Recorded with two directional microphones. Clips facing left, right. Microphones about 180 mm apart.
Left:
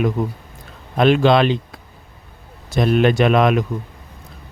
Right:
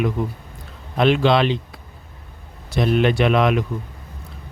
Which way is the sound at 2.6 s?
45° left (ahead or behind).